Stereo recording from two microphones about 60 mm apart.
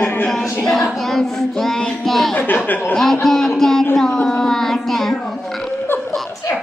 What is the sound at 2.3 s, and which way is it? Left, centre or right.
Speech, left.